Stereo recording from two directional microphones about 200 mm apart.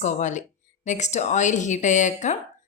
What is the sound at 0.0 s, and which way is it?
Speech, 35° left (ahead or behind).